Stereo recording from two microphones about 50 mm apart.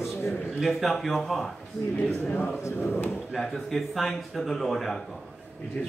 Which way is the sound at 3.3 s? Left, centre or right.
Centre.